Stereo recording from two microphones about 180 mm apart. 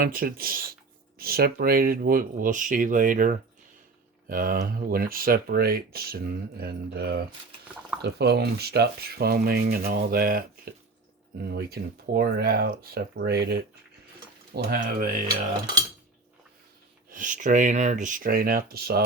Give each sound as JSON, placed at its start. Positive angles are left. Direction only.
{"t": 0.0, "sound": "speech", "side_deg": -55}
{"t": 14.5, "sound": "speech", "side_deg": -55}
{"t": 17.1, "sound": "speech", "side_deg": -45}